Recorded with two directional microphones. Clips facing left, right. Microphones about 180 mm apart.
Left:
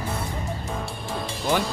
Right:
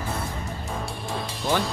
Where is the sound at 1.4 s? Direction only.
Centre (ahead or behind).